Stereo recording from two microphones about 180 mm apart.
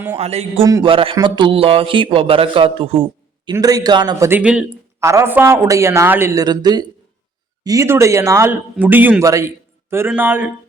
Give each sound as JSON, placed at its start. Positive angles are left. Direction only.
{"t": 0.2, "sound": "speech", "side_deg": -35}
{"t": 0.6, "sound": "a man's voice", "side_deg": -20}
{"t": 3.4, "sound": "a man's voice", "side_deg": -20}
{"t": 4.3, "sound": "a man's voice", "side_deg": -5}